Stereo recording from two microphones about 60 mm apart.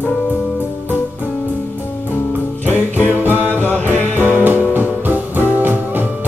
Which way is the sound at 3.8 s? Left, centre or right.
Left.